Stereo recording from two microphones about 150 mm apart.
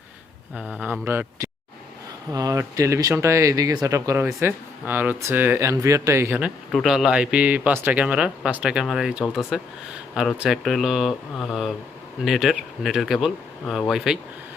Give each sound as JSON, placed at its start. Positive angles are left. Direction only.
{"t": 0.8, "sound": "speech", "side_deg": -15}
{"t": 6.7, "sound": "speech", "side_deg": 0}